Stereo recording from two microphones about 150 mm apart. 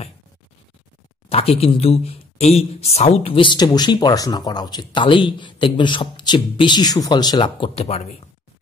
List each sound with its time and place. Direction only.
1.3 s speech: 40° left (ahead or behind)